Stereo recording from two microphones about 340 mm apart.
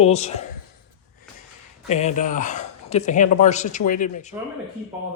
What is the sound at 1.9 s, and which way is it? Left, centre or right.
Speech, centre.